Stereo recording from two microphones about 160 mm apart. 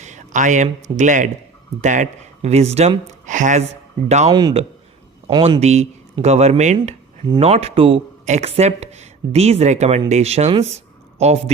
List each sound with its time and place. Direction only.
0.0 s speech: 50° right (ahead or behind)
8.2 s speech: 45° right (ahead or behind)